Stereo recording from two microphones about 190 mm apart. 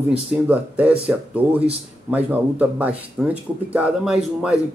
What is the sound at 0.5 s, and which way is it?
Speech, 5° right (ahead or behind).